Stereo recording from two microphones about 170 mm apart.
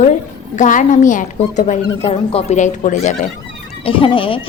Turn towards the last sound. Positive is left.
turn(degrees=30)  # may be behind; listen again after turning